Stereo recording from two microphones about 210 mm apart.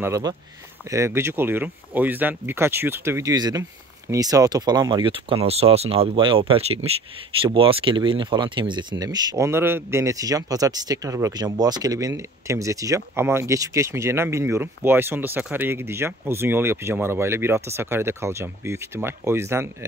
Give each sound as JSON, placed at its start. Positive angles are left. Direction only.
{"t": 0.0, "sound": "speech", "side_deg": -15}